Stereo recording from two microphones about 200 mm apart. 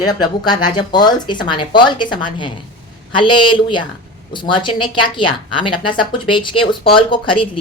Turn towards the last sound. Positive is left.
turn(degrees=25)  # may be behind; listen again after turning